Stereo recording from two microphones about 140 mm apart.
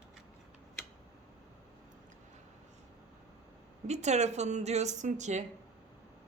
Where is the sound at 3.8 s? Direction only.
55° right (ahead or behind).